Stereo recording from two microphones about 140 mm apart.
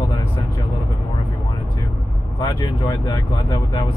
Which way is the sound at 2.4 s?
25° left (ahead or behind).